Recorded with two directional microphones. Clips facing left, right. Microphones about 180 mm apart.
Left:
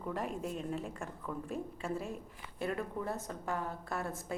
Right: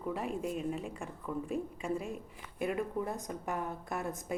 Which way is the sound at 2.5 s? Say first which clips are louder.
Right 3 dB; 15° right (ahead or behind).